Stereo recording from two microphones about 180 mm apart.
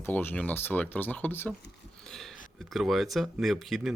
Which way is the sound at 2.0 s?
Centre (ahead or behind).